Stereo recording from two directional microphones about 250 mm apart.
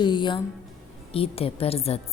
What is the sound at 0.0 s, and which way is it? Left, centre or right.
A woman's voice, centre.